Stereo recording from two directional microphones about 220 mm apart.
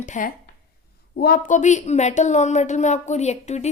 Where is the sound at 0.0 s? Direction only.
35° left (ahead or behind).